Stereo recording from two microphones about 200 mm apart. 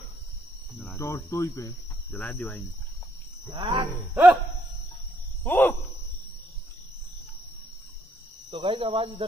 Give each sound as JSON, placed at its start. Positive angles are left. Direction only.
{"t": 0.8, "sound": "speech", "side_deg": 15}
{"t": 3.5, "sound": "speech", "side_deg": -25}
{"t": 4.1, "sound": "music", "side_deg": -10}
{"t": 5.4, "sound": "speech", "side_deg": 10}
{"t": 8.5, "sound": "speech", "side_deg": -25}